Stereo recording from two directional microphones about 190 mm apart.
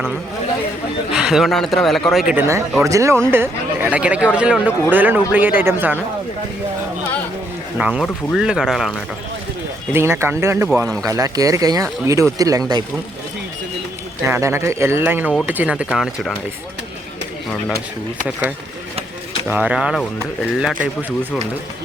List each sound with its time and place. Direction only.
1.1 s a man's voice: 5° right (ahead or behind)
2.3 s speech: 15° right (ahead or behind)
7.8 s a man's voice: 5° right (ahead or behind)
9.9 s speech: 15° right (ahead or behind)
14.3 s a man's voice: 15° right (ahead or behind)
19.5 s a man's voice: 5° right (ahead or behind)